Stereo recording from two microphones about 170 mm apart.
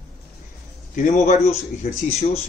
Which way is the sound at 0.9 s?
45° left (ahead or behind).